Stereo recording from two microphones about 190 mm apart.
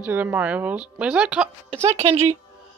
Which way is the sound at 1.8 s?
35° right (ahead or behind).